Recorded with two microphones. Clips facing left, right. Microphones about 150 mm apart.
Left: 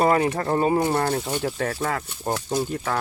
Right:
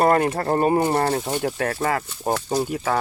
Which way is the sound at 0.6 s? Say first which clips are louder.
Right 2 dB; 55° right (ahead or behind).